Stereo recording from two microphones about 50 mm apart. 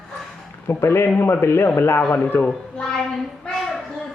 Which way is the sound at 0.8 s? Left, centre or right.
Left.